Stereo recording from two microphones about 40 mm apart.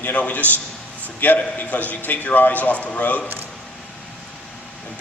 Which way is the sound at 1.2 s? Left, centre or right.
Left.